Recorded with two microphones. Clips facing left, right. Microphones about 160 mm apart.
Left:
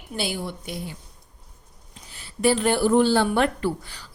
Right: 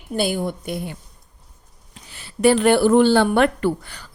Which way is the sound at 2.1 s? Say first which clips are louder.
Right 5 dB; 70° right (ahead or behind).